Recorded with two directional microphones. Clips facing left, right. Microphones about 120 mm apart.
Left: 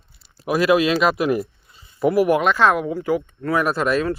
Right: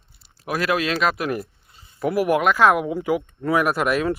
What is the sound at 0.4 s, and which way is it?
Speech, 5° left (ahead or behind).